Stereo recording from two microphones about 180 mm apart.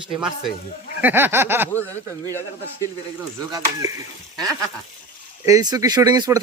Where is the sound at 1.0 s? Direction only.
10° right (ahead or behind).